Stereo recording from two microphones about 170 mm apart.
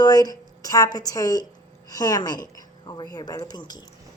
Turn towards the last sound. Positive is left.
turn(degrees=25)  # may be behind; listen again after turning